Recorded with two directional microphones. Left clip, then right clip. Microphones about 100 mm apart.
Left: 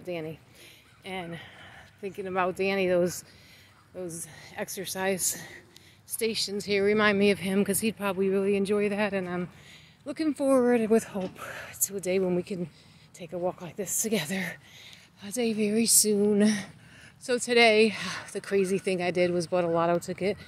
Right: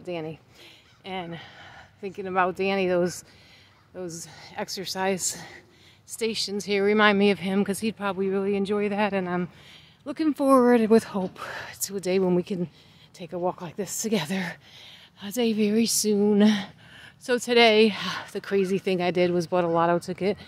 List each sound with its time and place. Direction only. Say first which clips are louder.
0.0 s speech: right 2 dB; 30° right (ahead or behind)
1.0 s a sound: right 3 dB; 25° right (ahead or behind)
2.0 s speech: right 4 dB; 30° right (ahead or behind)
4.2 s a woman's voice: right 3 dB; 30° right (ahead or behind)
7.4 s speech: right 1 dB; 15° right (ahead or behind)
8.8 s speech: right 2 dB; 25° right (ahead or behind)
9.1 s speech: right 4 dB; 45° right (ahead or behind)
9.7 s a sound: right 2 dB; 45° right (ahead or behind)
10.3 s speech: right 4 dB; 60° right (ahead or behind)
11.2 s speech: right 4 dB; 50° right (ahead or behind)
13.2 s speech: right 3 dB; 45° right (ahead or behind)
15.1 s a woman's voice: right 3 dB; 60° right (ahead or behind); by 16.7 s 40° right (ahead or behind)
16.9 s a woman's voice: right 3 dB; 60° right (ahead or behind); by 20.4 s 40° right (ahead or behind)